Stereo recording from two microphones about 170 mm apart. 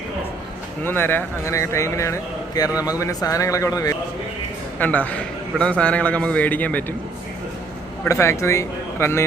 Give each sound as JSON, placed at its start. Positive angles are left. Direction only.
{"t": 0.9, "sound": "a man's voice", "side_deg": 10}
{"t": 4.8, "sound": "a man's voice", "side_deg": 10}
{"t": 8.0, "sound": "a man's voice", "side_deg": 15}